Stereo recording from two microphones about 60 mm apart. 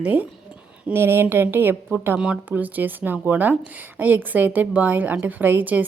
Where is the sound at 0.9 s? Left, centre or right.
Right.